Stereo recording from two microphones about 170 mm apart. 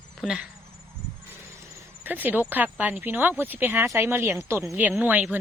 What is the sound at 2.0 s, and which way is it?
Speech, 10° right (ahead or behind).